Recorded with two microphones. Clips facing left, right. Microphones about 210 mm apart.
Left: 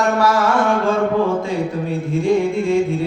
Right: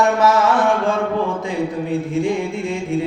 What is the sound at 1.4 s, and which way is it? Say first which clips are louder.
Music: even; 15° right (ahead or behind).